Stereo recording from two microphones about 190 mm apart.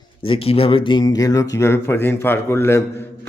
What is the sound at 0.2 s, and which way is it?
A man's voice, 30° left (ahead or behind).